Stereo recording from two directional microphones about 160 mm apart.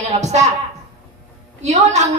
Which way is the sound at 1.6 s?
45° right (ahead or behind).